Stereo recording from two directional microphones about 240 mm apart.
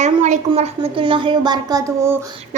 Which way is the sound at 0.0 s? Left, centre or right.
Right.